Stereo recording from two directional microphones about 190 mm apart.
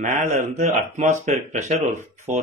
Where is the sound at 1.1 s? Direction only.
35° right (ahead or behind).